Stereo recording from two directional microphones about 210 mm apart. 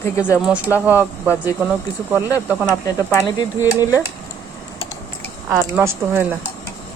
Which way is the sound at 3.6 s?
10° right (ahead or behind).